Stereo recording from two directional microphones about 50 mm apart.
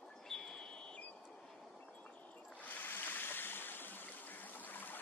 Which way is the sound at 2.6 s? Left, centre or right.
Left.